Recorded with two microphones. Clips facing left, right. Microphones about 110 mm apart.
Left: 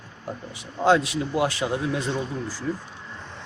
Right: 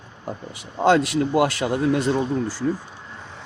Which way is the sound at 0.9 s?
65° right (ahead or behind).